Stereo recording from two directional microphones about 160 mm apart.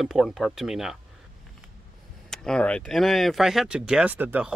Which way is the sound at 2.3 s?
5° left (ahead or behind).